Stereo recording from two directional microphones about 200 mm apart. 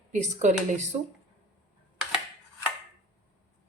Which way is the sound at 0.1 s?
35° right (ahead or behind).